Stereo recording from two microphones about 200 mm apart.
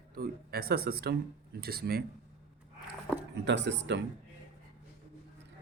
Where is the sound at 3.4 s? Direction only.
60° right (ahead or behind).